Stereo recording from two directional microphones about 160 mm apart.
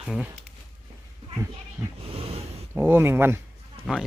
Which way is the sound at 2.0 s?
40° right (ahead or behind).